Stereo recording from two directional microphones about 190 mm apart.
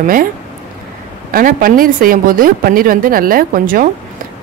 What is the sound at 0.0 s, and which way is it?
Speech, 45° right (ahead or behind).